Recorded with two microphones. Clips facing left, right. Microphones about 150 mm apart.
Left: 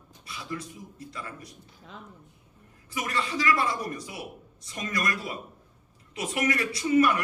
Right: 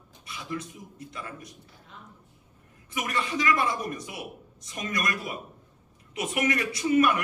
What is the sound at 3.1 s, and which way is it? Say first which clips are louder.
A man's voice: even; 20° right (ahead or behind).